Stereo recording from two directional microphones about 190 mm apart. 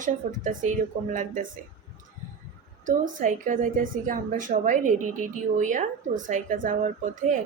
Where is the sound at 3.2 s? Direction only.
45° right (ahead or behind).